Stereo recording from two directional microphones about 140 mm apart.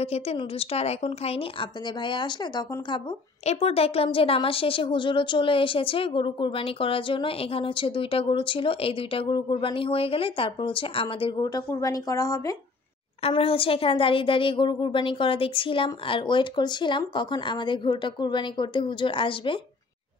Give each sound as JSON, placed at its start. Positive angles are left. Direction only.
{"t": 0.0, "sound": "a woman's voice", "side_deg": 45}
{"t": 3.4, "sound": "a woman's voice", "side_deg": 45}
{"t": 11.4, "sound": "speech", "side_deg": 25}
{"t": 13.3, "sound": "a woman's voice", "side_deg": 40}